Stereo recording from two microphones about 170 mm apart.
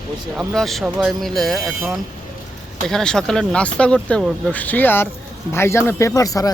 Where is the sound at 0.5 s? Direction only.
Centre (ahead or behind).